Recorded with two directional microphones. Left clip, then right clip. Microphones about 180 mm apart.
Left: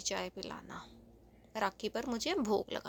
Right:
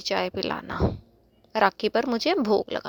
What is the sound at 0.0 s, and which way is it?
Speech, 40° right (ahead or behind).